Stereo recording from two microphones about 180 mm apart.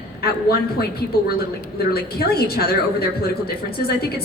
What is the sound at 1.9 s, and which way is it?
A woman's voice, 60° left (ahead or behind).